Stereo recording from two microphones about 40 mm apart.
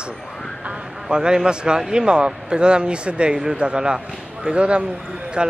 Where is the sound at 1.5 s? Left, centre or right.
Centre.